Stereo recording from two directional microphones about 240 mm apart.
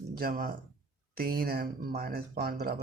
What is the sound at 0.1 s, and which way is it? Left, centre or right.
Speech, right.